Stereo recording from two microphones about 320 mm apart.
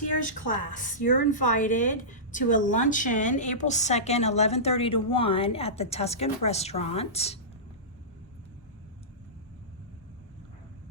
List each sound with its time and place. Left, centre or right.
0.3 s a woman's voice: left